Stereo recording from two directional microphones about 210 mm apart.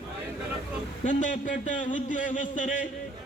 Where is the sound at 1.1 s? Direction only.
35° left (ahead or behind).